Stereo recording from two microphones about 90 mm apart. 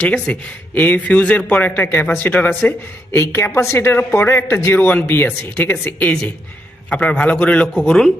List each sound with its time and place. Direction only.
0.0 s speech: 15° left (ahead or behind)